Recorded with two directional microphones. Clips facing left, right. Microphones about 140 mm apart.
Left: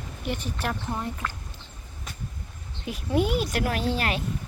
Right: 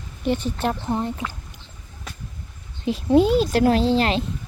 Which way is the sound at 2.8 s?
25° right (ahead or behind).